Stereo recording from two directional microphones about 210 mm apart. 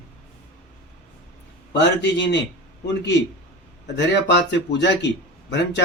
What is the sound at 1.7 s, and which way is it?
Speech, 55° left (ahead or behind).